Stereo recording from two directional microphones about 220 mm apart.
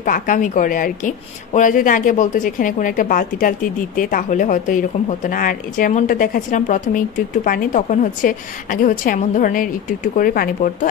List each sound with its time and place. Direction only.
0.0 s a woman's voice: 40° left (ahead or behind)